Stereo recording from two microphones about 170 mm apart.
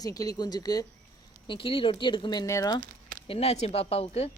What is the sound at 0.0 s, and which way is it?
Speech, 20° left (ahead or behind).